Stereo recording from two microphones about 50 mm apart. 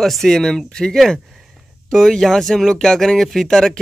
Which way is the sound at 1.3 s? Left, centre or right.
Centre.